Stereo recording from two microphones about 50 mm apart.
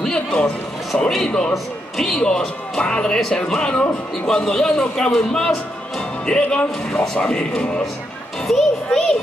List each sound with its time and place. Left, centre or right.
0.0 s music: centre
1.1 s a man's voice: centre
8.5 s a child's voice: centre